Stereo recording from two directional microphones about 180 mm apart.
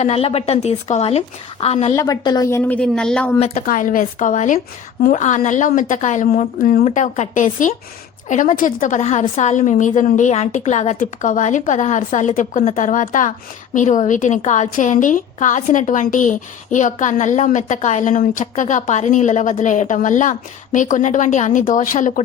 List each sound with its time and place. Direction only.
0.0 s speech: 35° left (ahead or behind)
2.0 s a woman's voice: 20° left (ahead or behind); by 3.3 s 5° left (ahead or behind)
3.3 s speech: 35° left (ahead or behind)
3.7 s a woman's voice: 50° left (ahead or behind)